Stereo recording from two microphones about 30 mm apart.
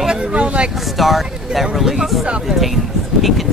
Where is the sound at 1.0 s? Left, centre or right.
Centre.